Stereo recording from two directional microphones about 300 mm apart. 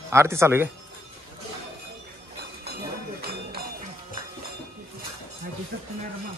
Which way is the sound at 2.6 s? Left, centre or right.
Right.